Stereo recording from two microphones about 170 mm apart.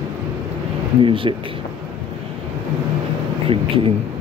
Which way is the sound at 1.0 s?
30° right (ahead or behind).